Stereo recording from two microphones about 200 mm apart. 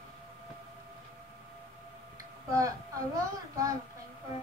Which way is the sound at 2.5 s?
15° right (ahead or behind).